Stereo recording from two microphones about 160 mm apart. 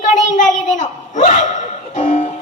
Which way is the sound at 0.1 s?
50° left (ahead or behind).